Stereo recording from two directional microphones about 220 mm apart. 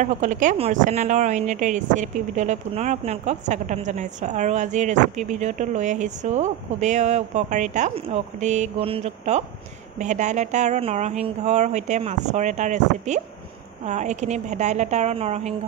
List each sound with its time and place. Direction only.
0.0 s speech: 35° right (ahead or behind)